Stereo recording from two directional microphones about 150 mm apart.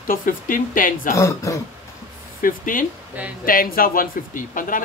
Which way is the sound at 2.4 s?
65° left (ahead or behind).